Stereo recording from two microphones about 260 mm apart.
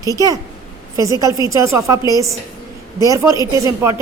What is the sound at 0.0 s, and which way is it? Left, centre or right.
A woman's voice, centre.